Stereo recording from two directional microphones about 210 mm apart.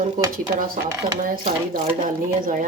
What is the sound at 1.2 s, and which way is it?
Speech, 40° right (ahead or behind).